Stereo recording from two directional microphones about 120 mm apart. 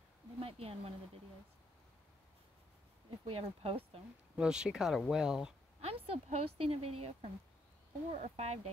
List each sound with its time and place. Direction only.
0.4 s speech: 55° right (ahead or behind)
3.3 s a woman's voice: 55° right (ahead or behind)
4.4 s speech: 5° right (ahead or behind)
5.9 s a woman's voice: 60° right (ahead or behind)
8.1 s speech: 65° right (ahead or behind)